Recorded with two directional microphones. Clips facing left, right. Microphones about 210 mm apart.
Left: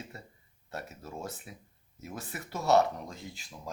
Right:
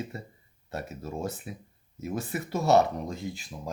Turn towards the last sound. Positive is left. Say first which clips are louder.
# right 8 dB
turn(degrees=-15)  # may be behind; listen again after turning